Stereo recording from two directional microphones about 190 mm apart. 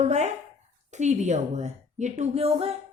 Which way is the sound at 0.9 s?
40° right (ahead or behind).